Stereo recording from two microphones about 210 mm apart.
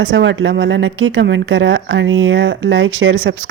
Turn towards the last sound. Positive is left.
turn(degrees=-60)  # may be behind; listen again after turning